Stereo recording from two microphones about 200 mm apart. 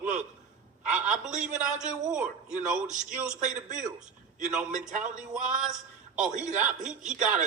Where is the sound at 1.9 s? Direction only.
5° right (ahead or behind).